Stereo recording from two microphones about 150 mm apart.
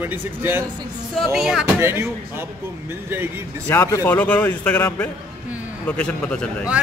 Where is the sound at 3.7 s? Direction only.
20° left (ahead or behind).